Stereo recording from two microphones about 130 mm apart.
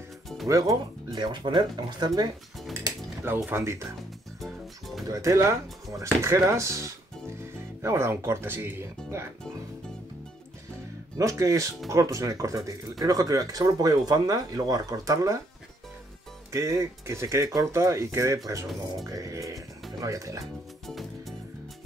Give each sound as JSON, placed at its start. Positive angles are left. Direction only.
{"t": 0.5, "sound": "speech", "side_deg": -25}
{"t": 2.7, "sound": "cutlery", "side_deg": -25}
{"t": 4.4, "sound": "music", "side_deg": 0}
{"t": 5.0, "sound": "speech", "side_deg": -25}
{"t": 11.1, "sound": "speech", "side_deg": -25}
{"t": 16.5, "sound": "speech", "side_deg": -25}
{"t": 20.8, "sound": "music", "side_deg": 0}